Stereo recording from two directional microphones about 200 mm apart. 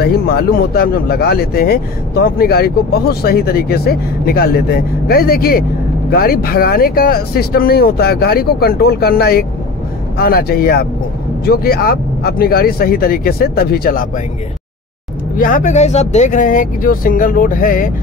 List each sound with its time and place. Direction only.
0.0 s speech: 50° left (ahead or behind)
15.3 s speech: 45° left (ahead or behind)